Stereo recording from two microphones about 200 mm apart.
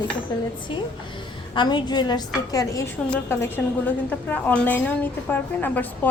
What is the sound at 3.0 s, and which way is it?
A woman's voice, 10° left (ahead or behind).